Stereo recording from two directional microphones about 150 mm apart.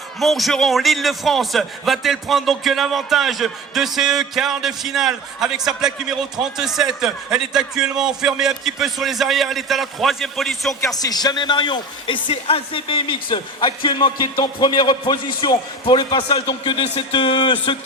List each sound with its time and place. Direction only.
0.2 s a man's voice: centre (ahead or behind)
10.9 s speech: 25° left (ahead or behind)